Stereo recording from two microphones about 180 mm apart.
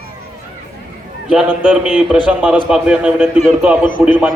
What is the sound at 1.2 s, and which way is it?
A man's voice, 5° right (ahead or behind).